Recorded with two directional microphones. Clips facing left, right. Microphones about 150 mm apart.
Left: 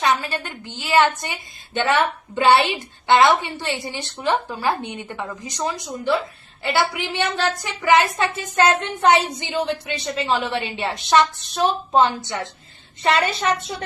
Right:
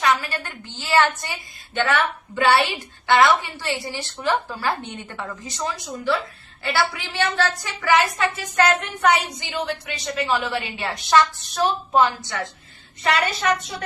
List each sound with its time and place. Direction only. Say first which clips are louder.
0.0 s a woman's voice: left 1 dB; 25° left (ahead or behind)